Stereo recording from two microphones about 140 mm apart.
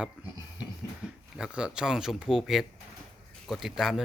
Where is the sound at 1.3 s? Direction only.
5° right (ahead or behind).